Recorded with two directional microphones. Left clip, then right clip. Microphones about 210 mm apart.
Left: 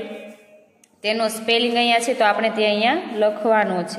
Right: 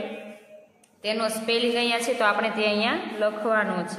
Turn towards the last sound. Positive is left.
turn(degrees=25)  # may be behind; listen again after turning